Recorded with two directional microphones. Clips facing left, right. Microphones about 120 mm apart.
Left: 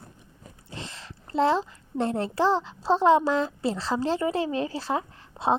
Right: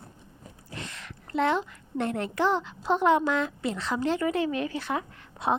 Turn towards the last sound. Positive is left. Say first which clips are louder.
# left 3 dB
turn(degrees=30)  # may be behind; listen again after turning